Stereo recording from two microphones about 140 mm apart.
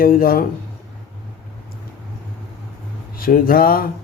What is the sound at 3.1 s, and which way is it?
Speech, 90° left.